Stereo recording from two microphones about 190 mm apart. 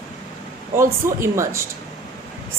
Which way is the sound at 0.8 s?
15° right (ahead or behind).